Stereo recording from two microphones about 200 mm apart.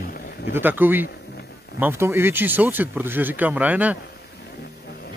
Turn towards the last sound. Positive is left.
turn(degrees=-5)  # may be behind; listen again after turning